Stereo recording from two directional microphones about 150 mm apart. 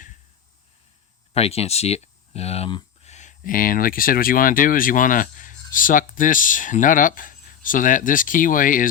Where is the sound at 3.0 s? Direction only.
50° left (ahead or behind).